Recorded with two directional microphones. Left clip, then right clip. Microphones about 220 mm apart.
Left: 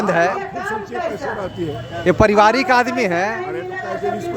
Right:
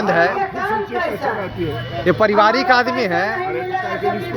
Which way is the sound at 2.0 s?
25° left (ahead or behind).